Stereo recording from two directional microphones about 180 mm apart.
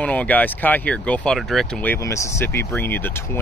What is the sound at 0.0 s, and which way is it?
Speech, 10° left (ahead or behind).